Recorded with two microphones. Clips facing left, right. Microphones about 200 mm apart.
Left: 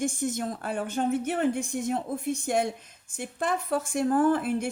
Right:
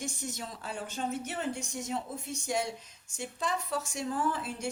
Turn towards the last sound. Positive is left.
turn(degrees=55)  # may be behind; listen again after turning